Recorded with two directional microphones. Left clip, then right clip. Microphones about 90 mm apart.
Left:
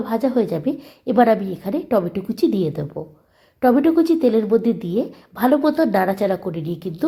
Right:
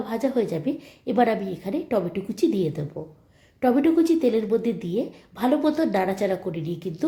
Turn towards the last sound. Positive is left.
turn(degrees=40)  # may be behind; listen again after turning